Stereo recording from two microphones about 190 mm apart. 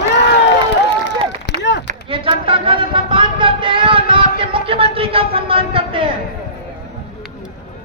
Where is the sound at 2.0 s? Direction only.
30° right (ahead or behind).